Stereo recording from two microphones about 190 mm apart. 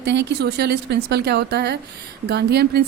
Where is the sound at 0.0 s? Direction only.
65° right (ahead or behind).